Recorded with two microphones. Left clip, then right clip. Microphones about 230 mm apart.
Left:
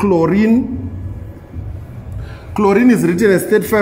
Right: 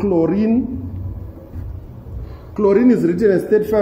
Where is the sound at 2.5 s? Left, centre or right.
Left.